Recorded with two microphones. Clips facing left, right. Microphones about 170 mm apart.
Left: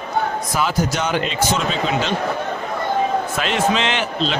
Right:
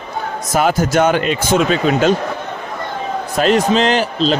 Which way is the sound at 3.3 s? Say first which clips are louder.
Right 6 dB; 40° right (ahead or behind).